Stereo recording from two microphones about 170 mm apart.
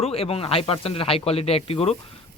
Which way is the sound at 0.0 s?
35° left (ahead or behind).